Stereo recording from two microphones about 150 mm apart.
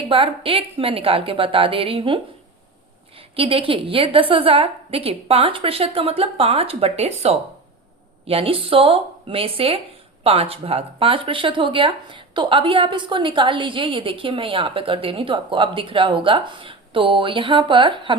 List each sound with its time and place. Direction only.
0.1 s speech: 35° right (ahead or behind)
3.3 s speech: 40° right (ahead or behind)